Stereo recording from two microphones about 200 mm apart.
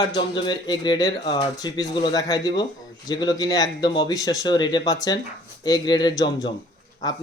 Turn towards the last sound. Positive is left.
turn(degrees=20)  # may be behind; listen again after turning